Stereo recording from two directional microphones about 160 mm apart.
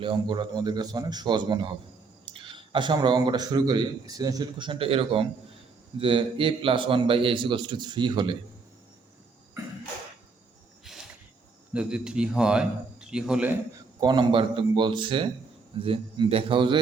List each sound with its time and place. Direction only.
0.0 s a man's voice: 30° right (ahead or behind)
10.9 s a sound: centre (ahead or behind)
11.7 s a man's voice: 5° right (ahead or behind)
14.0 s a man's voice: 30° right (ahead or behind)